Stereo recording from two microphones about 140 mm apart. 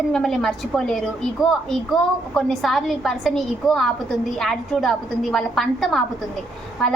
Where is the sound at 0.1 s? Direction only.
5° left (ahead or behind).